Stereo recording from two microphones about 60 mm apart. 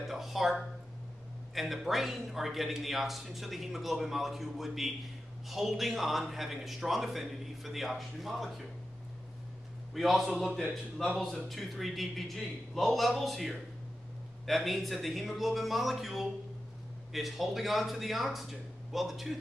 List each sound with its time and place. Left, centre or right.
0.0 s a sound: centre
1.5 s a man's voice: centre
9.9 s a man's voice: centre